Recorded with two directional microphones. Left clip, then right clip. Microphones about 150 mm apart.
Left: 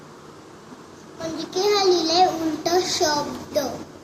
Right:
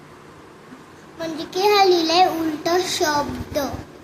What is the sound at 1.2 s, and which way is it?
A child's voice, 90° right.